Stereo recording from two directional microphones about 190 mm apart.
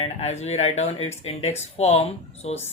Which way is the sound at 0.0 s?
35° left (ahead or behind).